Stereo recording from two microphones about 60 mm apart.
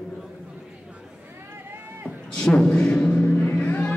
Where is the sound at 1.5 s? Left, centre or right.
Right.